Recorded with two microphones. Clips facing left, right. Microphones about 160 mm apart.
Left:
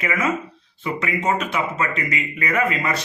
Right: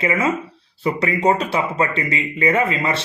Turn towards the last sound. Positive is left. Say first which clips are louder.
# right 2 dB
turn(degrees=-30)  # may be behind; listen again after turning